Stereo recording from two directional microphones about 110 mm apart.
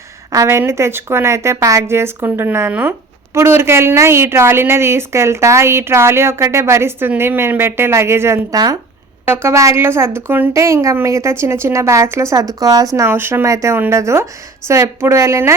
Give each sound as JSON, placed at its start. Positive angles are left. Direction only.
{"t": 0.3, "sound": "a woman's voice", "side_deg": -25}
{"t": 8.5, "sound": "speech", "side_deg": -35}
{"t": 9.2, "sound": "a woman's voice", "side_deg": -20}
{"t": 13.1, "sound": "a woman's voice", "side_deg": -20}